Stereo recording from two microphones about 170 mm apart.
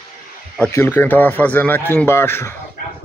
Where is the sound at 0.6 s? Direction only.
15° left (ahead or behind).